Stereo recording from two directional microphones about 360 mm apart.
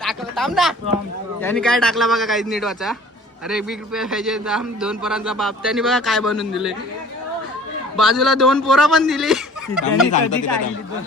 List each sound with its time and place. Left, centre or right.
0.0 s a sound: centre
1.4 s a man's voice: centre
7.9 s a man's voice: centre
9.8 s speech: left